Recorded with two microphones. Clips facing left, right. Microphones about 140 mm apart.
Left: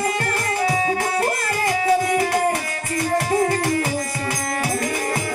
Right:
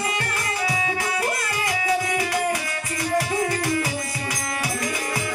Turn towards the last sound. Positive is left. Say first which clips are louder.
# left 4 dB
turn(degrees=45)  # may be behind; listen again after turning